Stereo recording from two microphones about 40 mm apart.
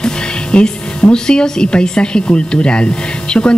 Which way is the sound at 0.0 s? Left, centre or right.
Left.